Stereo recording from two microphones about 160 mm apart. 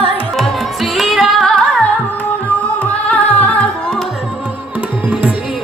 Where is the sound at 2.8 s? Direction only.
10° left (ahead or behind).